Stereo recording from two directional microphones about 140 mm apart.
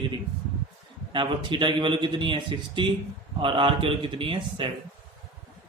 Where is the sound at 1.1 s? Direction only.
35° right (ahead or behind).